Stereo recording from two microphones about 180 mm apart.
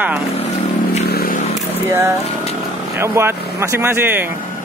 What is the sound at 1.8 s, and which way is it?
Speech, 15° right (ahead or behind).